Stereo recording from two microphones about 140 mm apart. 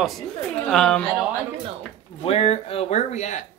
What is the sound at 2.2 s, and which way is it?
Speech, 50° left (ahead or behind).